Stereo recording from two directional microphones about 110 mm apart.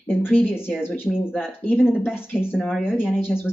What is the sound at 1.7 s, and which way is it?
A woman's voice, 5° right (ahead or behind).